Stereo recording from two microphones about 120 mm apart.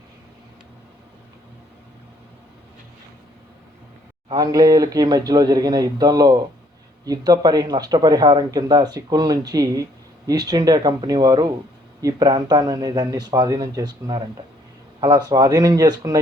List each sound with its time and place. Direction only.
4.4 s speech: 30° right (ahead or behind)